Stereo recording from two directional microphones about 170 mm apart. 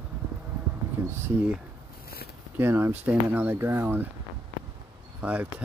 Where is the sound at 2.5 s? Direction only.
15° right (ahead or behind).